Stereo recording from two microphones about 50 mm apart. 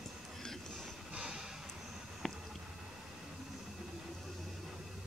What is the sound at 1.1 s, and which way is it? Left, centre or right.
Vehicle, centre.